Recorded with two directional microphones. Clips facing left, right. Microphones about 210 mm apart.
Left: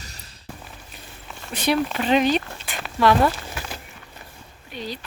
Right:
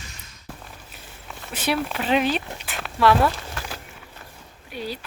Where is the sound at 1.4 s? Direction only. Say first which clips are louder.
Left 3 dB; 5° right (ahead or behind).